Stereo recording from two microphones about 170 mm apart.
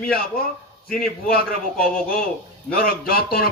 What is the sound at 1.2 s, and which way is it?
A man's voice, 60° left (ahead or behind).